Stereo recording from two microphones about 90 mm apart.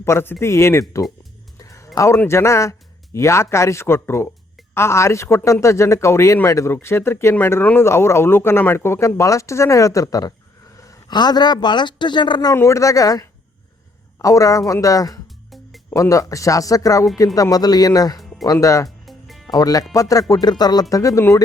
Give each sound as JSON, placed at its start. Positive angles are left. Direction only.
{"t": 0.0, "sound": "speech", "side_deg": 30}
{"t": 1.5, "sound": "music", "side_deg": 35}
{"t": 2.0, "sound": "speech", "side_deg": 30}
{"t": 11.1, "sound": "speech", "side_deg": 50}
{"t": 12.5, "sound": "speech", "side_deg": 35}
{"t": 19.0, "sound": "music", "side_deg": 0}
{"t": 19.5, "sound": "speech", "side_deg": 45}